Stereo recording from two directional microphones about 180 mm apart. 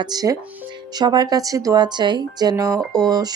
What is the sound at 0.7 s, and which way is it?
A woman's voice, 20° right (ahead or behind).